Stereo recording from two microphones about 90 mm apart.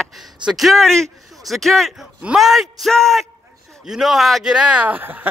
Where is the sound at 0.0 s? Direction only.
Centre (ahead or behind).